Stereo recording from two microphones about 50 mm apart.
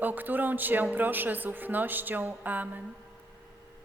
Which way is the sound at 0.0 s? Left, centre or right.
Right.